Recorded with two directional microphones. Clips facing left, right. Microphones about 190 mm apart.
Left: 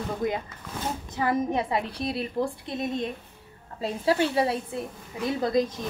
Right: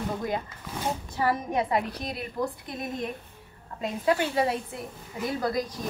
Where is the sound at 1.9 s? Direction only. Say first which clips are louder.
Left 5 dB; 30° left (ahead or behind).